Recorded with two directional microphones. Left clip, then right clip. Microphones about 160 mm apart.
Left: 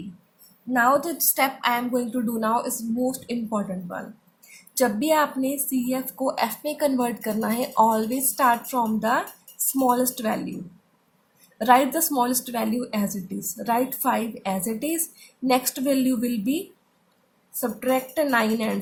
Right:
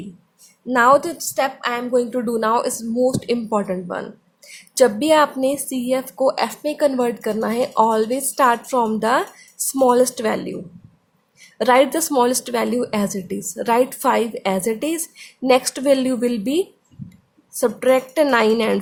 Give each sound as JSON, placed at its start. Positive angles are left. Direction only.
{"t": 0.7, "sound": "a woman's voice", "side_deg": -40}
{"t": 1.3, "sound": "a woman's voice", "side_deg": -15}
{"t": 11.5, "sound": "a woman's voice", "side_deg": -35}